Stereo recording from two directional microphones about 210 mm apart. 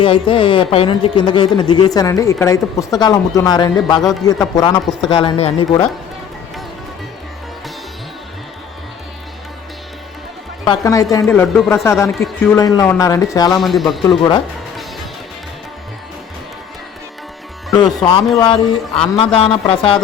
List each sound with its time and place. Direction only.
0.0 s speech: 25° left (ahead or behind)
10.7 s speech: 15° left (ahead or behind)
13.6 s speech: centre (ahead or behind)
14.2 s speech: 20° left (ahead or behind)
18.3 s speech: 20° left (ahead or behind)